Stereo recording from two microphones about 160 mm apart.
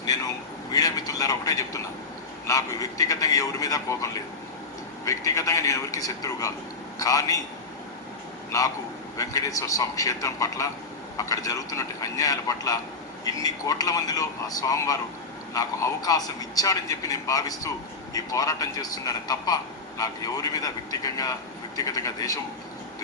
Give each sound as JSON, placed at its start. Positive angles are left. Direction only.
{"t": 0.0, "sound": "vehicle", "side_deg": 20}
{"t": 2.5, "sound": "a man's voice", "side_deg": 20}
{"t": 8.5, "sound": "a man's voice", "side_deg": 20}